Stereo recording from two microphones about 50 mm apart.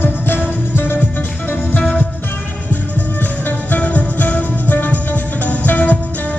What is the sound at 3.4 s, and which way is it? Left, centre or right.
Music, left.